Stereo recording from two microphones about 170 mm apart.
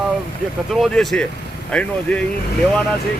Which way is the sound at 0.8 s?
Centre (ahead or behind).